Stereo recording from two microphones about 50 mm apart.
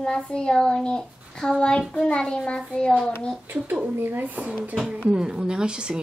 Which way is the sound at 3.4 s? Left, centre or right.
Right.